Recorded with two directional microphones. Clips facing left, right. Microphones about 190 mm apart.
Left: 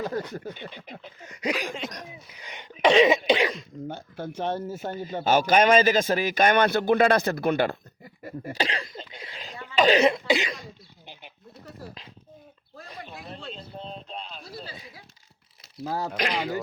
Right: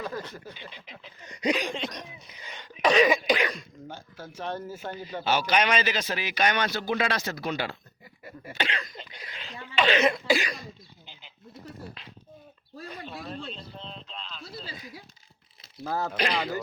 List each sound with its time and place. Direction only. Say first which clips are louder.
0.3 s a man's voice: left 7 dB; 55° left (ahead or behind)
1.5 s speech: right 2 dB; 5° left (ahead or behind)
2.4 s speech: left 1 dB; 15° left (ahead or behind)
2.8 s cough: left 3 dB; 25° left (ahead or behind)
3.8 s speech: left 9 dB; 55° left (ahead or behind)
4.4 s speech: left 4 dB; 20° left (ahead or behind)
4.8 s a man's voice: left 4 dB; 45° left (ahead or behind); by 9.4 s 30° left (ahead or behind)
9.4 s cough: left 4 dB; 40° left (ahead or behind)
10.2 s speech: left 1 dB; 20° left (ahead or behind)
11.0 s frog: left 10 dB; 65° left (ahead or behind)
13.1 s speech: right 3 dB; 15° left (ahead or behind)
13.7 s a man's voice: left 5 dB; 45° left (ahead or behind)
15.8 s speech: even; 15° left (ahead or behind)